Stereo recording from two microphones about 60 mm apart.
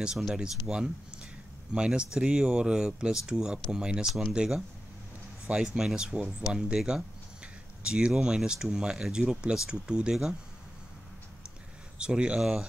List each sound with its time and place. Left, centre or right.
0.3 s speech: centre
7.8 s speech: centre
12.0 s speech: centre